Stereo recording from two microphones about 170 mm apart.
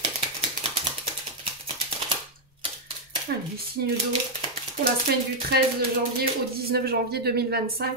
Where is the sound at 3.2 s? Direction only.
65° right (ahead or behind).